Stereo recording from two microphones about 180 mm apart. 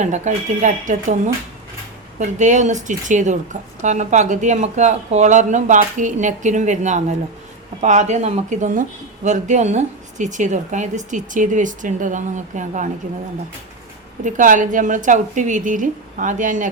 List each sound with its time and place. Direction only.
0.0 s speech: 40° right (ahead or behind)
14.3 s speech: 45° right (ahead or behind)